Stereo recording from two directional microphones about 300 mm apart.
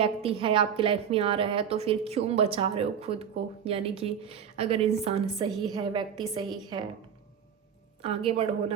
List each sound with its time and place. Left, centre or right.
0.0 s a woman's voice: centre
8.0 s a woman's voice: centre